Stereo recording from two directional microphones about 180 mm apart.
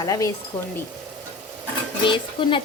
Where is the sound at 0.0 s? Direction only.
20° left (ahead or behind).